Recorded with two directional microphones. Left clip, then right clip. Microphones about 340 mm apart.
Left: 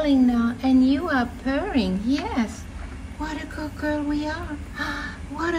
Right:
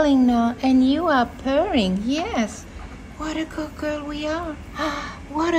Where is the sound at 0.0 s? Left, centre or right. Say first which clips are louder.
Right 3 dB; right.